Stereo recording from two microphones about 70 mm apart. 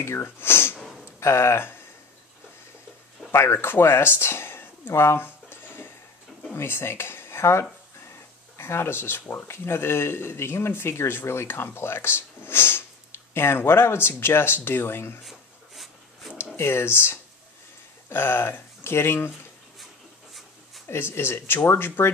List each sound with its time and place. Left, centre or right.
0.0 s speech: left
0.7 s snort: centre
1.2 s speech: left
3.3 s speech: left
15.2 s writing: centre
16.5 s speech: left
20.9 s speech: left